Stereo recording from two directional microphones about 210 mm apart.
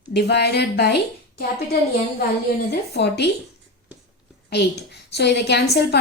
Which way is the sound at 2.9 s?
50° left (ahead or behind).